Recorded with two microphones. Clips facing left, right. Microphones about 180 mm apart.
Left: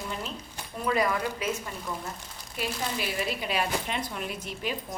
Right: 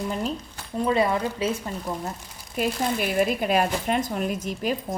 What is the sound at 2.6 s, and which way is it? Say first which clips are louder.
A woman's voice: right 7 dB; 50° right (ahead or behind).